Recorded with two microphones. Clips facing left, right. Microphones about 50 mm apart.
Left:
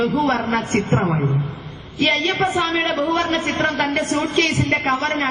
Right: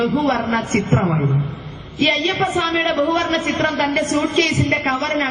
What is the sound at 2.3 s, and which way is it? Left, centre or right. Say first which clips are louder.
Speech: even; left.